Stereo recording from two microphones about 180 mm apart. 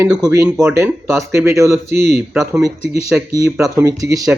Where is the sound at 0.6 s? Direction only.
15° right (ahead or behind).